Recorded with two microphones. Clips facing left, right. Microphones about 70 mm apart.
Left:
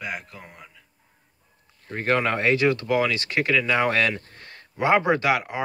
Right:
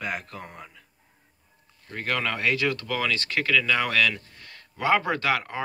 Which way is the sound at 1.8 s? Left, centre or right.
Left.